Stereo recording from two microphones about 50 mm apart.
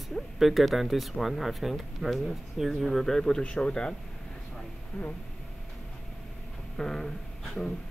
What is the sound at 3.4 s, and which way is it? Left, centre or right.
Speech, left.